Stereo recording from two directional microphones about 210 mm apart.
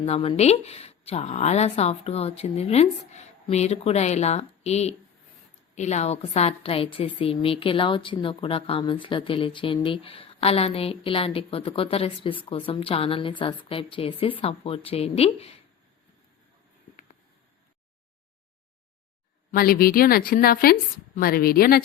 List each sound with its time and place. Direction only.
0.0 s a woman's voice: 30° left (ahead or behind)
19.5 s a woman's voice: 45° left (ahead or behind)